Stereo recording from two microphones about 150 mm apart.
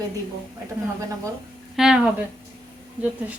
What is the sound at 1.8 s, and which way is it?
Speech, 5° right (ahead or behind).